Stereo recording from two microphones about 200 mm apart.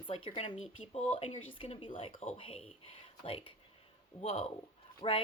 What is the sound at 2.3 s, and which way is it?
Speech, 30° left (ahead or behind).